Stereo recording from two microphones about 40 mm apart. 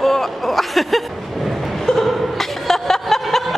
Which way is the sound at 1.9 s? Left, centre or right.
Centre.